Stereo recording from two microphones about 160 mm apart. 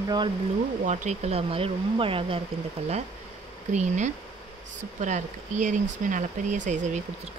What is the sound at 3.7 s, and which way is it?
Speech, 50° right (ahead or behind).